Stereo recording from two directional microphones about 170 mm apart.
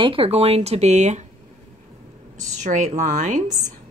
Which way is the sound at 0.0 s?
35° right (ahead or behind).